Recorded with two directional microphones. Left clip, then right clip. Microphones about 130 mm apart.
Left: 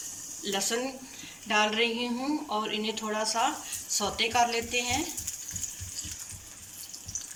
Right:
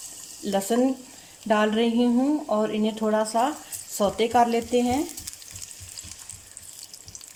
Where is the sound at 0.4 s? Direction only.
65° right (ahead or behind).